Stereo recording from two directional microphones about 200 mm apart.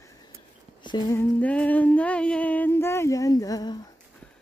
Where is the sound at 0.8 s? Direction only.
20° left (ahead or behind).